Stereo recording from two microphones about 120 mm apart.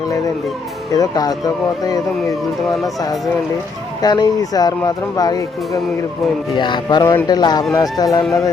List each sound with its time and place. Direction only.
0.9 s speech: 30° left (ahead or behind)
7.0 s speech: 20° left (ahead or behind)
7.3 s speech: 35° left (ahead or behind)
8.2 s speech: centre (ahead or behind)